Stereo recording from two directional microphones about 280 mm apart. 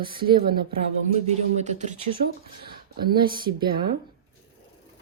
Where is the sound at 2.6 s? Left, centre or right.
Right.